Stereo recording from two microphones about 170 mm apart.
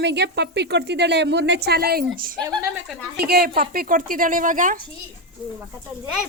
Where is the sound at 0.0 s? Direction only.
85° right; by 4.8 s 50° right (ahead or behind).